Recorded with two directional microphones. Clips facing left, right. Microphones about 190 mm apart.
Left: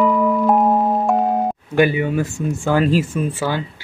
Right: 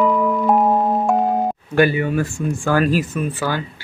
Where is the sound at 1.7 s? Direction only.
15° left (ahead or behind).